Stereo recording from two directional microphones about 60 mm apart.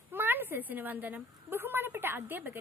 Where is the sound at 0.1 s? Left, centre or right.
Right.